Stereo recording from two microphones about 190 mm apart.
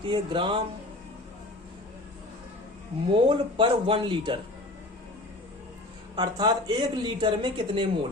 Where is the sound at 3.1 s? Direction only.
25° right (ahead or behind).